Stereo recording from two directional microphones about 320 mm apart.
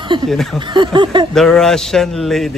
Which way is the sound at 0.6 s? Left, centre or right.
Centre.